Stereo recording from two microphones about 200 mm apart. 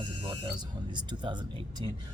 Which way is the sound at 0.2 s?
25° right (ahead or behind).